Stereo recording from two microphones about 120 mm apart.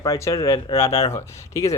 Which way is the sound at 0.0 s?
30° left (ahead or behind).